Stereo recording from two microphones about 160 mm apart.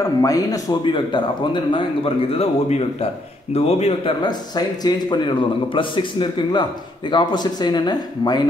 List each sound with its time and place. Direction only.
0.2 s speech: 20° left (ahead or behind)